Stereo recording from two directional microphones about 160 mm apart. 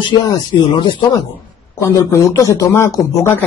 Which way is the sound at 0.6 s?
30° left (ahead or behind).